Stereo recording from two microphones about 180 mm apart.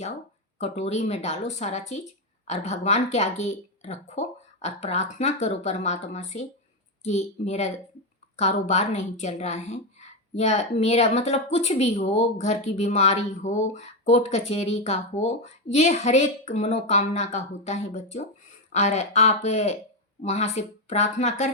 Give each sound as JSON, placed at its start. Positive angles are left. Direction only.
{"t": 0.6, "sound": "a woman's voice", "side_deg": 40}